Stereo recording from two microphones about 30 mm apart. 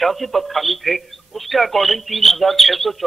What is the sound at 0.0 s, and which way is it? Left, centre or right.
A man's voice, centre.